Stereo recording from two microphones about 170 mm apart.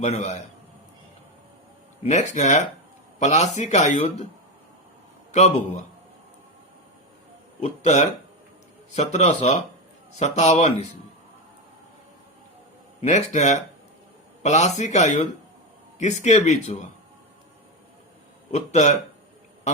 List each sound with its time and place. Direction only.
0.0 s speech: 40° left (ahead or behind)
2.0 s speech: 45° left (ahead or behind)
7.6 s speech: 40° left (ahead or behind)
13.0 s speech: 45° left (ahead or behind)
18.5 s speech: 40° left (ahead or behind)
19.7 s a sound: 40° left (ahead or behind)